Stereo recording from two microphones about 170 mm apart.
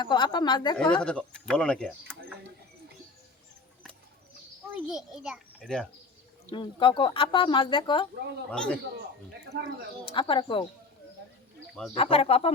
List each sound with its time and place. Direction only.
0.0 s a woman's voice: 25° left (ahead or behind)
1.0 s speech: 5° left (ahead or behind)
4.7 s a child's voice: centre (ahead or behind)
6.5 s a woman's voice: 30° left (ahead or behind)
8.4 s speech: 5° left (ahead or behind)
9.5 s speech: 75° right (ahead or behind)
10.1 s a woman's voice: 30° left (ahead or behind)
11.9 s speech: 35° left (ahead or behind)